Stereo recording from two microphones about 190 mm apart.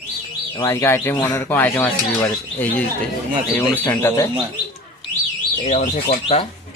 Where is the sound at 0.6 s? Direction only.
15° left (ahead or behind).